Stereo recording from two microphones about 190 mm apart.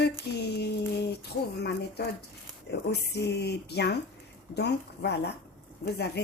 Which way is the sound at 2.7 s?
60° left (ahead or behind).